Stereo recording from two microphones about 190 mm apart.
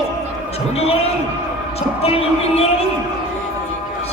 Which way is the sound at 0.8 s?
30° left (ahead or behind).